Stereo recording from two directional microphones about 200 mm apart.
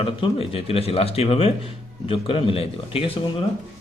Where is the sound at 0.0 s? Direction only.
30° left (ahead or behind).